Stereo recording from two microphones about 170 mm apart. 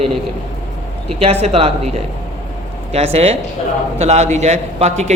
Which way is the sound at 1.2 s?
35° right (ahead or behind).